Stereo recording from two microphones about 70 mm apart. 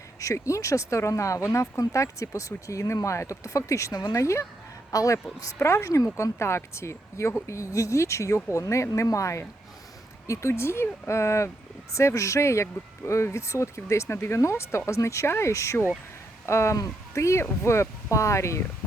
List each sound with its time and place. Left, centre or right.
0.2 s speech: left
5.4 s speech: left